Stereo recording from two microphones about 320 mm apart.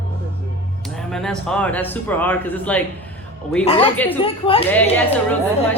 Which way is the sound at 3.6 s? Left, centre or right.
Centre.